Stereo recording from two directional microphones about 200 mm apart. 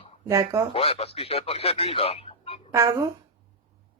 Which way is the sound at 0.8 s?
30° left (ahead or behind).